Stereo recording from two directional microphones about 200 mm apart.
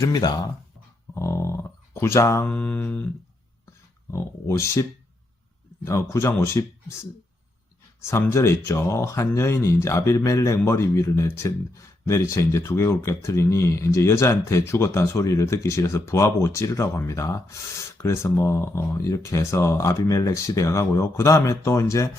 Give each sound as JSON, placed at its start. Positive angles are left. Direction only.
{"t": 0.0, "sound": "speech", "side_deg": 20}
{"t": 4.1, "sound": "speech", "side_deg": 15}
{"t": 8.0, "sound": "speech", "side_deg": 15}